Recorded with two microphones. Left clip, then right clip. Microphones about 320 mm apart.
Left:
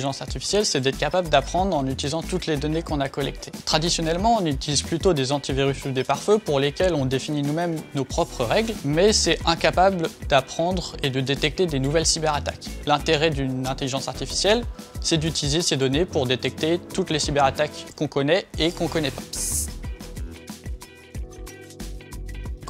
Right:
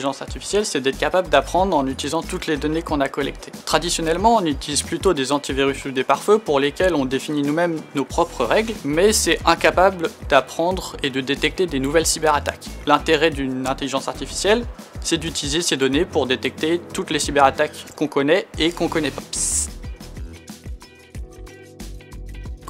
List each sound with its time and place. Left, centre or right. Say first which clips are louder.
0.0 s speech: right 3 dB; left